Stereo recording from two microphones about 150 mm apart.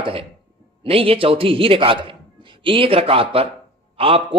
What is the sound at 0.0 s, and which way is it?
A man's voice, 40° right (ahead or behind).